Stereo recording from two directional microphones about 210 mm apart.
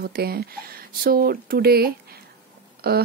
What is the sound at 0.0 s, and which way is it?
Speech, 45° right (ahead or behind).